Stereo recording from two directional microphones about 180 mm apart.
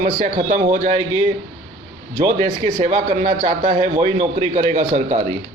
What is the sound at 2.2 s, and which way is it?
A man's voice, 45° right (ahead or behind).